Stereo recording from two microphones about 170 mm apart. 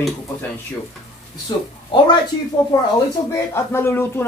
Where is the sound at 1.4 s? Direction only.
25° left (ahead or behind).